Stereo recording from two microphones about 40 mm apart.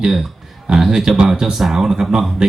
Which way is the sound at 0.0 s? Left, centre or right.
Centre.